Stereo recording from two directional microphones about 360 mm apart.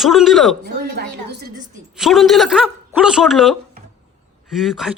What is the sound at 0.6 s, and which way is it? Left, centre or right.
Speech, right.